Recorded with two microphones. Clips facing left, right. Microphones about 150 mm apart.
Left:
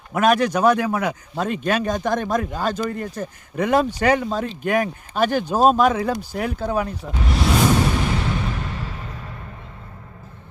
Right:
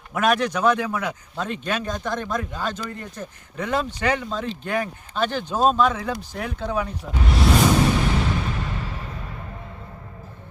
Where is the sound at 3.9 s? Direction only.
40° left (ahead or behind).